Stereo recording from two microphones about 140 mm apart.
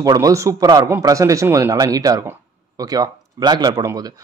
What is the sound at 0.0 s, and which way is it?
Speech, 25° right (ahead or behind).